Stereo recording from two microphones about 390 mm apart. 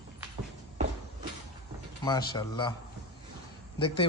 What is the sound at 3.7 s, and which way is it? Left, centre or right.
Speech, centre.